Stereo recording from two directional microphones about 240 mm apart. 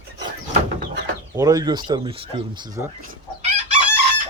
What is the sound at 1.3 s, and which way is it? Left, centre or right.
Speech, centre.